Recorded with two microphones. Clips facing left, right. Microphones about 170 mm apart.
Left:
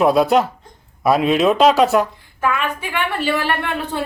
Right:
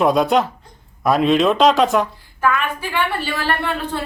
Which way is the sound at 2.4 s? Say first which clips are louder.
Right 1 dB; 20° left (ahead or behind).